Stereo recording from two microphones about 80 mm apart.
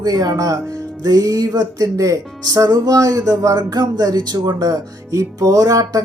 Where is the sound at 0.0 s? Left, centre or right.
Right.